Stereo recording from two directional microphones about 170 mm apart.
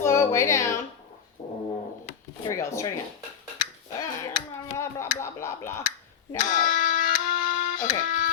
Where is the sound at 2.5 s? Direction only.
15° left (ahead or behind).